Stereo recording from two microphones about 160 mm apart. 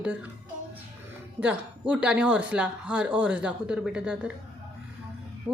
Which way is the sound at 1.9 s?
5° right (ahead or behind).